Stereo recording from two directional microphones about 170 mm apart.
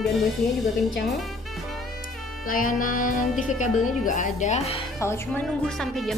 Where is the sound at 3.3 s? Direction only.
Centre (ahead or behind).